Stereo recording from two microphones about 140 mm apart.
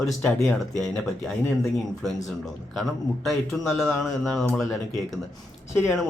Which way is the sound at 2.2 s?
Centre (ahead or behind).